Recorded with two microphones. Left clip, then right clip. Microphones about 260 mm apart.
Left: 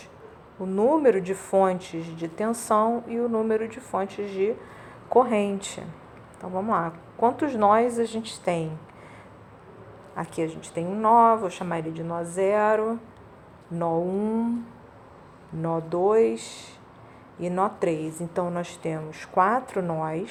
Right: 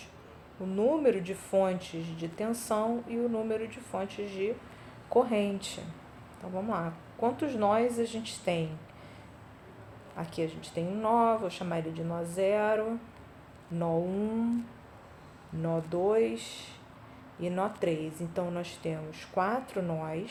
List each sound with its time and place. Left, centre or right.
0.8 s a woman's voice: centre
10.4 s a woman's voice: centre
15.6 s a woman's voice: centre